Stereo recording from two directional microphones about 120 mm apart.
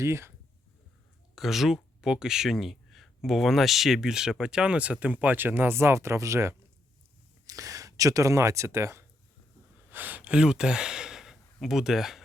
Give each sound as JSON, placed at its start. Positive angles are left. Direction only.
{"t": 0.0, "sound": "speech", "side_deg": -20}
{"t": 1.4, "sound": "speech", "side_deg": 0}